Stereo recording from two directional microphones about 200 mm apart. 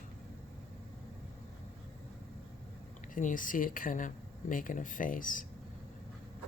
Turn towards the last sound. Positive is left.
turn(degrees=40)  # may be behind; listen again after turning